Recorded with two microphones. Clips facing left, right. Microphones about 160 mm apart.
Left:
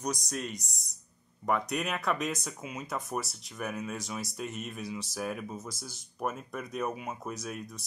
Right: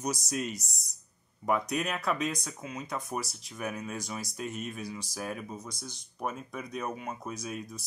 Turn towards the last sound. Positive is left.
turn(degrees=0)  # may be behind; listen again after turning